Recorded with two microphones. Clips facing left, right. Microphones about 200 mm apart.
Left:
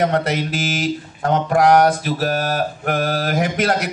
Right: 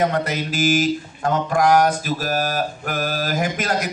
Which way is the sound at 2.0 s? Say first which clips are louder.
Left 2 dB; 65° left (ahead or behind).